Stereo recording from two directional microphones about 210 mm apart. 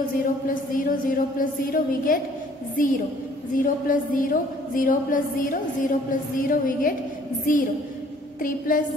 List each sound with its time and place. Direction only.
0.7 s a woman's voice: 40° left (ahead or behind)